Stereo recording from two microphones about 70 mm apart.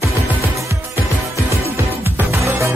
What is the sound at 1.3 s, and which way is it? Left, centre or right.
Music, right.